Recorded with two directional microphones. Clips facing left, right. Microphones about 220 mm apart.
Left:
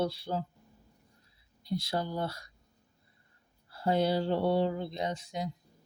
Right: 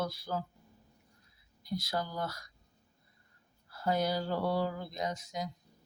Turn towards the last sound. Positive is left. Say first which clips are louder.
# left 2 dB
turn(degrees=30)  # may be behind; listen again after turning